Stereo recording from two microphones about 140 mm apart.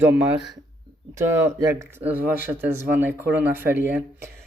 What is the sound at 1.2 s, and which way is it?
Speech, 20° right (ahead or behind).